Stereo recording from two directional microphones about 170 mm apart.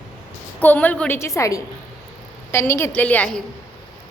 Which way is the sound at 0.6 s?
10° left (ahead or behind).